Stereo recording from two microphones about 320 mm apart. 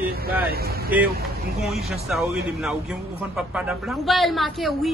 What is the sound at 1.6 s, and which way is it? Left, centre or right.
Speech, centre.